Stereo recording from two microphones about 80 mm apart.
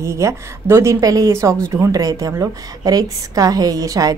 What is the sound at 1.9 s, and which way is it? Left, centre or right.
A woman's voice, right.